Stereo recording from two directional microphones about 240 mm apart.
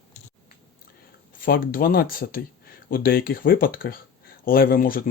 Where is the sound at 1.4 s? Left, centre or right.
Left.